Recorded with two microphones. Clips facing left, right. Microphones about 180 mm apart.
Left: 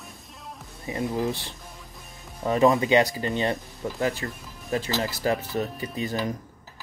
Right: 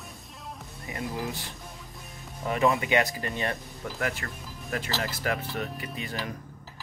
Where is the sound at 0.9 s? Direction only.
25° left (ahead or behind).